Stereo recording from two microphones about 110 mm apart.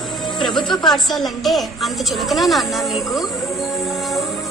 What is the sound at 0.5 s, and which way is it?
A woman's voice, 5° left (ahead or behind).